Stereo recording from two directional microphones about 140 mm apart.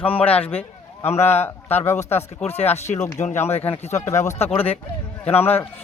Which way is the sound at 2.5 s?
50° left (ahead or behind).